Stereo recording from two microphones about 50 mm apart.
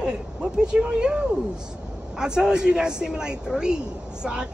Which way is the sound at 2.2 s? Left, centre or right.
Centre.